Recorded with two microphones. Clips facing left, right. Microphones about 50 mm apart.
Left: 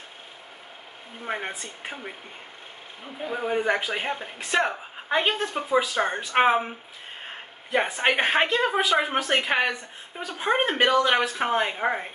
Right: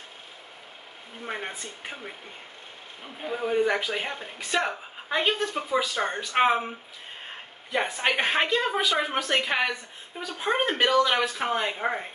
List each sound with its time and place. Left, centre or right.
1.2 s speech: centre
3.3 s speech: centre
8.1 s a woman's voice: left